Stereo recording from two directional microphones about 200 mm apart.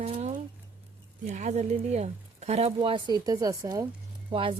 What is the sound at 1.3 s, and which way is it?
Speech, 35° right (ahead or behind).